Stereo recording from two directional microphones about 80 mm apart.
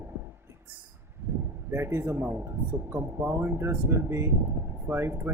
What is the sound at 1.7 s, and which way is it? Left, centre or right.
Speech, right.